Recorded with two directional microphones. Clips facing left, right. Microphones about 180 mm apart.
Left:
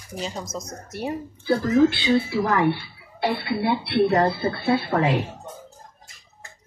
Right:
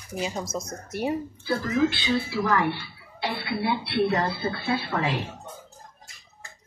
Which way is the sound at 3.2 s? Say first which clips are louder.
Left 5 dB; 55° left (ahead or behind).